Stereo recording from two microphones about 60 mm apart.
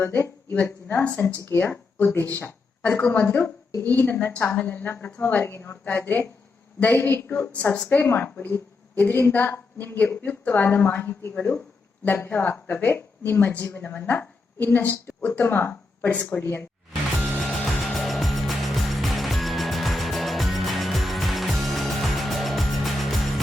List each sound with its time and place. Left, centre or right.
0.0 s a woman's voice: left
0.5 s speech: left
1.5 s a woman's voice: left
2.8 s speech: left
3.1 s a woman's voice: left
7.6 s speech: centre
7.9 s a woman's voice: left
16.4 s a woman's voice: left
17.4 s music: centre